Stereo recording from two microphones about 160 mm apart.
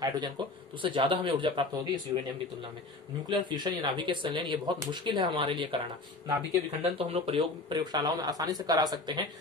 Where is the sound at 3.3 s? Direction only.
25° right (ahead or behind).